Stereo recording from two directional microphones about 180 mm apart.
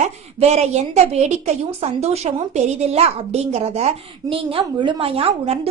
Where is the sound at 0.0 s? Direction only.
40° right (ahead or behind).